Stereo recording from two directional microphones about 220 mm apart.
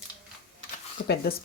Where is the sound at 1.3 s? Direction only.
45° left (ahead or behind).